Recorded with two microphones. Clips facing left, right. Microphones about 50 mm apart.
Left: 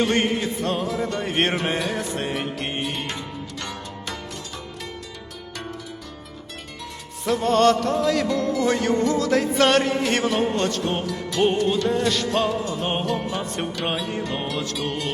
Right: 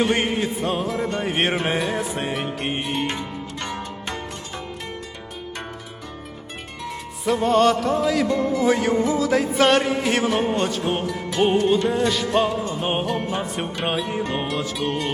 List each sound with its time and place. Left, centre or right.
0.0 s music: centre
3.1 s music: right
7.3 s music: centre
11.9 s music: centre